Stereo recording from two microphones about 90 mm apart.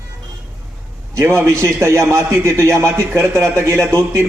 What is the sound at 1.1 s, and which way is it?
A man's voice, 30° right (ahead or behind).